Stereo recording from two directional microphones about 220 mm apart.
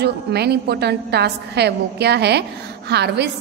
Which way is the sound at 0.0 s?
45° right (ahead or behind).